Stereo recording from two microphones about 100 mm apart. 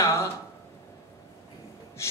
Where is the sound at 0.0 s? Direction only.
30° left (ahead or behind).